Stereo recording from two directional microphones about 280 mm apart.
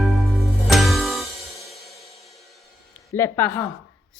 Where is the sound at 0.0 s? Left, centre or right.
Centre.